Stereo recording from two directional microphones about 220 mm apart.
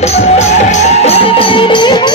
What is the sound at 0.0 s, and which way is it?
Music, 30° left (ahead or behind).